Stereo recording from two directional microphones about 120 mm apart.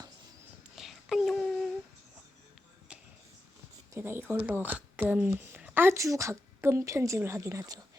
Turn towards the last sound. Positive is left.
turn(degrees=-30)  # may be behind; listen again after turning